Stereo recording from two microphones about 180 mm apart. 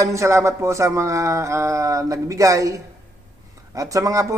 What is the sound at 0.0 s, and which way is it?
A man's voice, 15° right (ahead or behind).